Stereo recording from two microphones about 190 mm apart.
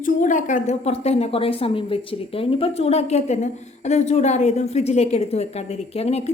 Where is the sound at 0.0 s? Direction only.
40° left (ahead or behind).